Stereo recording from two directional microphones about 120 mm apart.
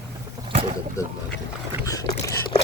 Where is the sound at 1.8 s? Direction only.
30° left (ahead or behind).